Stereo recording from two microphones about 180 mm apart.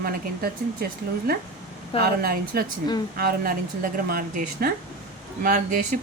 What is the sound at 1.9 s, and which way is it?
Speech, 55° right (ahead or behind).